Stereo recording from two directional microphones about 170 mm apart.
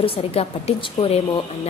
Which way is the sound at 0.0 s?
35° left (ahead or behind).